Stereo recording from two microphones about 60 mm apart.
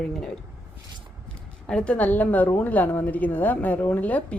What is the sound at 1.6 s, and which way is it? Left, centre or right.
A woman's voice, centre.